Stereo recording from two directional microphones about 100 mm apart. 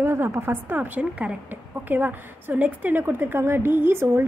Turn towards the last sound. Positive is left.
turn(degrees=-25)  # may be behind; listen again after turning